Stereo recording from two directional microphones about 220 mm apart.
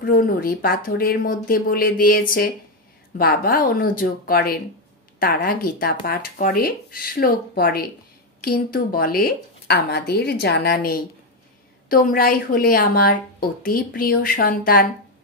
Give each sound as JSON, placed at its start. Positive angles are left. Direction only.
{"t": 0.0, "sound": "a woman's voice", "side_deg": 40}